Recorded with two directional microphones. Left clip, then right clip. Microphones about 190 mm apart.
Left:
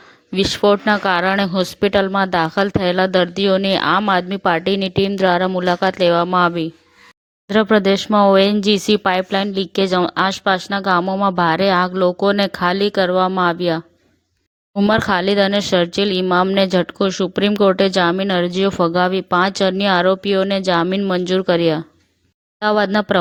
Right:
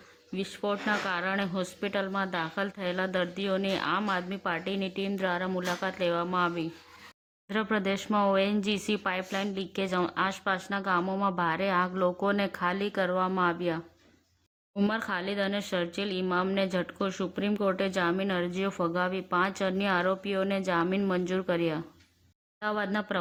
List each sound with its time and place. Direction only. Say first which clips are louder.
0.3 s speech: left 17 dB; 45° left (ahead or behind)
14.8 s speech: left 16 dB; 45° left (ahead or behind)